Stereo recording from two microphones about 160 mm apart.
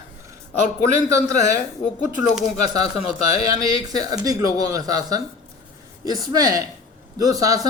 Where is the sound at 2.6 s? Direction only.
40° left (ahead or behind).